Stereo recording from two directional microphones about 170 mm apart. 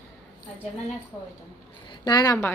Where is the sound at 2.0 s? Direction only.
25° left (ahead or behind).